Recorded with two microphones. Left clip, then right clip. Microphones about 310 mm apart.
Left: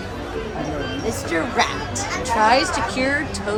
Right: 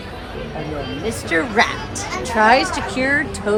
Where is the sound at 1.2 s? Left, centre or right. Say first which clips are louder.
Right 4 dB; right.